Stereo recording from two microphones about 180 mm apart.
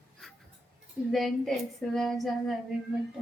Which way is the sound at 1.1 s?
Centre (ahead or behind).